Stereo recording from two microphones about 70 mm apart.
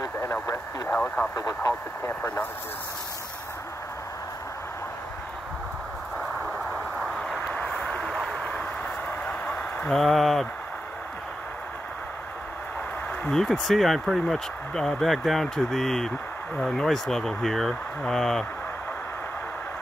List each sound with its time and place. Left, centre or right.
0.8 s speech: left
1.3 s speech: left
1.7 s speech: left
6.1 s a sound: centre
9.8 s speech: centre
13.3 s speech: centre